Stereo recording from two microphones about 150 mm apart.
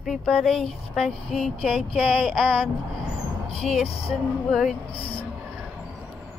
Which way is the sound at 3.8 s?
40° left (ahead or behind).